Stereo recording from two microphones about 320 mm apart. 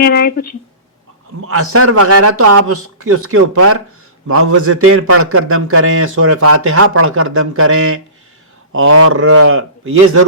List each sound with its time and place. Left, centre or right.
0.0 s speech: left
1.5 s a man's voice: right